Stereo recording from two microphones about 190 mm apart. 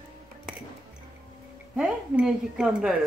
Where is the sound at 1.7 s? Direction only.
5° right (ahead or behind).